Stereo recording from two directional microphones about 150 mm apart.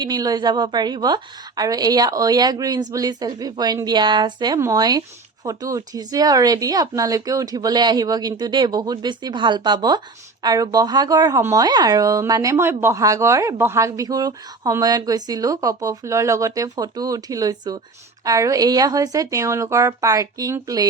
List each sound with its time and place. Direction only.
0.0 s speech: 25° right (ahead or behind)